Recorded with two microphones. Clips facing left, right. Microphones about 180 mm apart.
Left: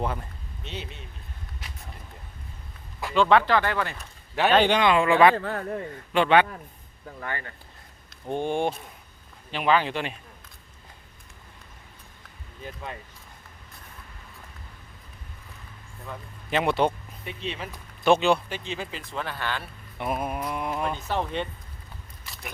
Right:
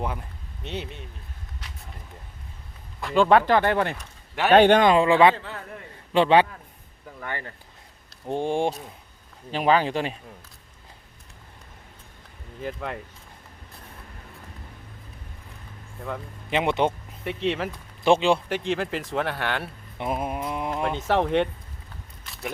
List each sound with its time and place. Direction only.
0.0 s speech: 10° right (ahead or behind)
0.6 s speech: 60° right (ahead or behind)
3.2 s speech: 45° right (ahead or behind)
4.9 s speech: 25° right (ahead or behind)
5.4 s speech: 50° left (ahead or behind)
6.1 s speech: 30° right (ahead or behind)
12.6 s speech: 75° right (ahead or behind)
16.5 s speech: 20° right (ahead or behind)
17.2 s speech: 80° right
17.7 s speech: 25° right (ahead or behind)
18.4 s speech: 75° right (ahead or behind)
19.6 s speech: 25° right (ahead or behind)
21.1 s speech: 70° right (ahead or behind)